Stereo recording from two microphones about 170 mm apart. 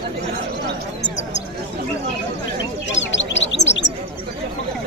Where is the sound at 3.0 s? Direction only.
90° left.